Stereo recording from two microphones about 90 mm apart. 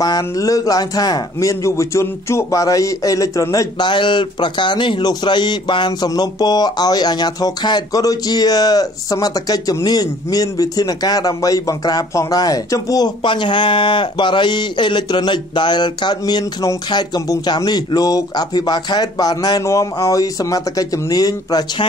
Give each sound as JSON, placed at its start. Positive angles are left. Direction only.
{"t": 0.0, "sound": "a man's voice", "side_deg": 45}
{"t": 3.8, "sound": "speech", "side_deg": 60}
{"t": 13.2, "sound": "speech", "side_deg": 60}